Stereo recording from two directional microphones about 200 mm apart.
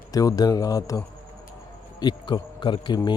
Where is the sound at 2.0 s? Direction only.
20° left (ahead or behind).